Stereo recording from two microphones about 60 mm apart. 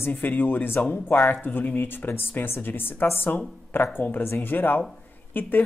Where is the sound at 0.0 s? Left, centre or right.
Left.